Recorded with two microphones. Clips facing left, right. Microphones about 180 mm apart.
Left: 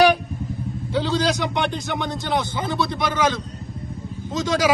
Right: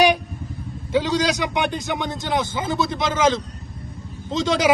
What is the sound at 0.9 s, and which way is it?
A man's voice, 15° right (ahead or behind).